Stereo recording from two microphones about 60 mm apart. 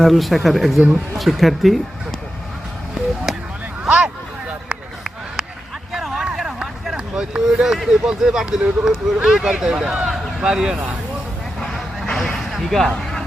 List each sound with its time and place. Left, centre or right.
0.0 s speech: centre
3.3 s a sound: centre
3.8 s vehicle: centre
5.9 s vehicle: centre
6.9 s speech: centre
11.6 s a sound: centre
13.0 s music: centre